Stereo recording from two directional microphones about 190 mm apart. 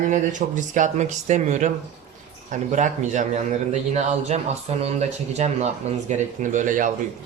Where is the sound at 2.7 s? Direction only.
40° right (ahead or behind).